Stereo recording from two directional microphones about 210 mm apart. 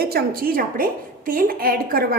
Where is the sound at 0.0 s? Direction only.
45° right (ahead or behind).